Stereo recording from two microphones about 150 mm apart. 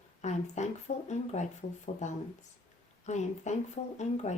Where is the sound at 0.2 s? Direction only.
50° left (ahead or behind).